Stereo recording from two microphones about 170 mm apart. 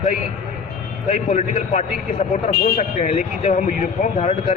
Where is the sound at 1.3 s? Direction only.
40° left (ahead or behind).